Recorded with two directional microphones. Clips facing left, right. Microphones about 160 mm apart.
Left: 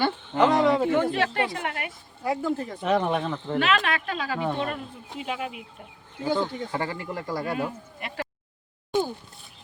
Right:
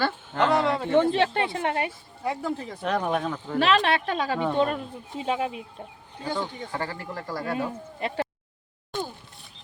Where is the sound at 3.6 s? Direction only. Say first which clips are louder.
Right 5 dB; 35° right (ahead or behind).